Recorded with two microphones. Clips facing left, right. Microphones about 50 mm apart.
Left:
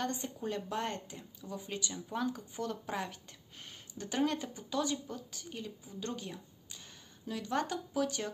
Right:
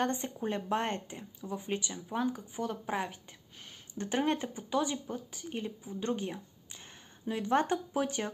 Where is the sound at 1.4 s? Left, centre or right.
Right.